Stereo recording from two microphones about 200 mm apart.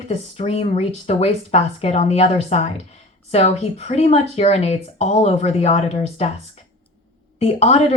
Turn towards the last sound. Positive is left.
turn(degrees=30)  # may be behind; listen again after turning